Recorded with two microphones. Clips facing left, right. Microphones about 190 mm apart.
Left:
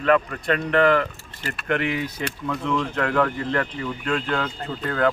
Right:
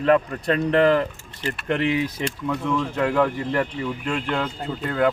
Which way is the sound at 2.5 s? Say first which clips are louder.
Even; 10° right (ahead or behind).